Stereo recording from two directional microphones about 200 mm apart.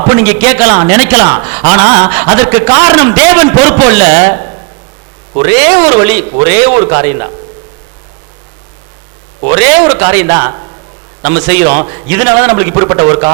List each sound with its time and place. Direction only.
0.2 s a man's voice: 15° right (ahead or behind)
5.4 s a man's voice: 15° right (ahead or behind)
9.5 s a man's voice: 15° right (ahead or behind)